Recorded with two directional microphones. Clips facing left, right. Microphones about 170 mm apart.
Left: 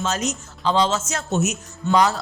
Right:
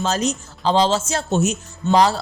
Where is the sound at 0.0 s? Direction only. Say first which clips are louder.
Right 3 dB; 35° right (ahead or behind).